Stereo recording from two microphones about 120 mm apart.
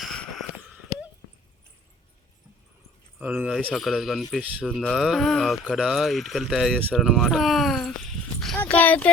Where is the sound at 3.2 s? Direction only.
10° right (ahead or behind).